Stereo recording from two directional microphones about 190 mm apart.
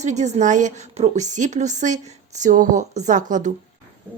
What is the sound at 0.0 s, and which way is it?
A woman's voice, 35° right (ahead or behind).